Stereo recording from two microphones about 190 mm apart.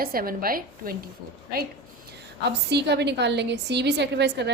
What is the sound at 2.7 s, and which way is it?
A woman's voice, 60° right (ahead or behind).